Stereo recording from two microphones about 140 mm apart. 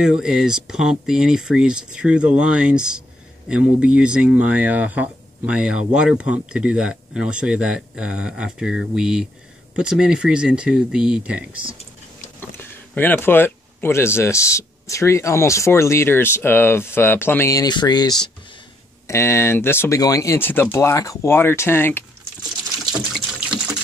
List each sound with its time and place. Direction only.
0.0 s speech: 5° right (ahead or behind)
12.4 s speech: 15° left (ahead or behind)